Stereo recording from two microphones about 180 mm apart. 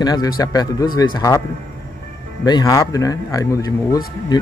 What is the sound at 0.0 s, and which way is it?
Speech, 20° left (ahead or behind).